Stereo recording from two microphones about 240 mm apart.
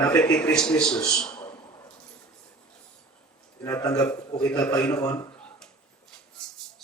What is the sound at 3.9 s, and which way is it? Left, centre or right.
A man's voice, centre.